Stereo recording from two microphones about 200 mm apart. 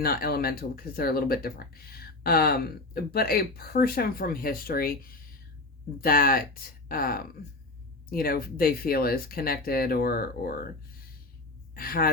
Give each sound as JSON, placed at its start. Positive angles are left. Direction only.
{"t": 0.0, "sound": "speech", "side_deg": 50}
{"t": 11.7, "sound": "a woman's voice", "side_deg": 45}